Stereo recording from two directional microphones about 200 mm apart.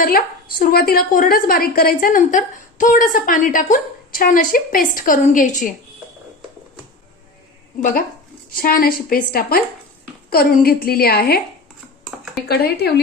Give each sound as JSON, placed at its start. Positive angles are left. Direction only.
{"t": 0.6, "sound": "a woman's voice", "side_deg": 50}
{"t": 7.8, "sound": "a woman's voice", "side_deg": 40}
{"t": 12.5, "sound": "a woman's voice", "side_deg": 55}